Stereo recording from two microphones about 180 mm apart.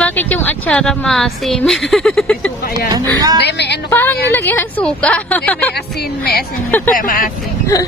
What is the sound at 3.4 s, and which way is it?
Speech, 70° left (ahead or behind).